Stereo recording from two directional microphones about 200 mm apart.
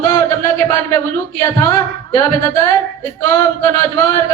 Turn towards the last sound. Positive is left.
turn(degrees=15)  # may be behind; listen again after turning